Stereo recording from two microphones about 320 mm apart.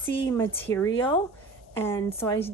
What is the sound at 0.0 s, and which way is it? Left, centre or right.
A woman's voice, centre.